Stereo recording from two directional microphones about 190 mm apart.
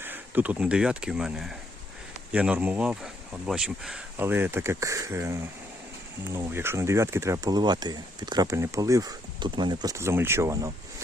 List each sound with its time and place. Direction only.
0.0 s speech: 10° right (ahead or behind)